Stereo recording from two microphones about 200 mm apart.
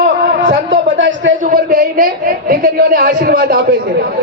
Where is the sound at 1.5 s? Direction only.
45° right (ahead or behind).